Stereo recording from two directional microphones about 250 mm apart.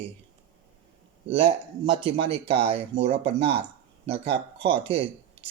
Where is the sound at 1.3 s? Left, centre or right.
Right.